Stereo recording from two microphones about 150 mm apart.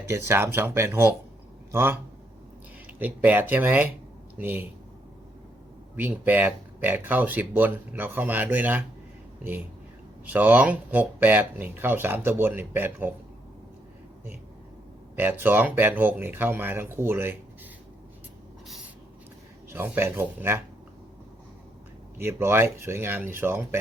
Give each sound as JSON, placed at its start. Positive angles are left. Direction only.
{"t": 0.0, "sound": "speech", "side_deg": -15}
{"t": 6.0, "sound": "speech", "side_deg": -10}
{"t": 10.2, "sound": "speech", "side_deg": -10}
{"t": 15.1, "sound": "speech", "side_deg": -15}
{"t": 19.7, "sound": "speech", "side_deg": -15}
{"t": 22.2, "sound": "speech", "side_deg": -15}